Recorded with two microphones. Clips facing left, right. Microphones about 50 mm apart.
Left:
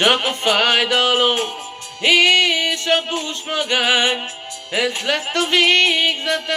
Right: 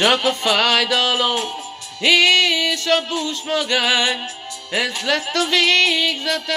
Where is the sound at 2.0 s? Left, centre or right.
Left.